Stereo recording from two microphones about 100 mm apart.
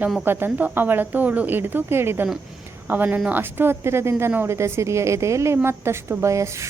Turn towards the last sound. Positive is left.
turn(degrees=-30)  # may be behind; listen again after turning